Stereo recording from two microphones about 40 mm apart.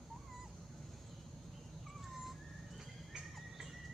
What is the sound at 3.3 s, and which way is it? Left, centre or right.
Music, centre.